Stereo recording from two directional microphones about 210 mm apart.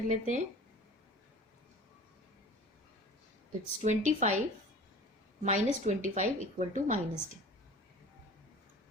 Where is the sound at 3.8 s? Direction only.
35° right (ahead or behind).